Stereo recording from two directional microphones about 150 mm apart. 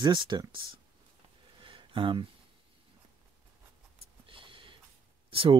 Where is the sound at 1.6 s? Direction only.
35° right (ahead or behind).